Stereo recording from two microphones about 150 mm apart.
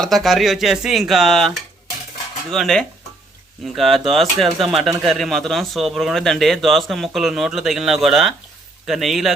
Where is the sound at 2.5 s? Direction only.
Centre (ahead or behind).